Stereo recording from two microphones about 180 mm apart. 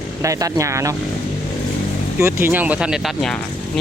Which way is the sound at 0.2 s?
20° right (ahead or behind).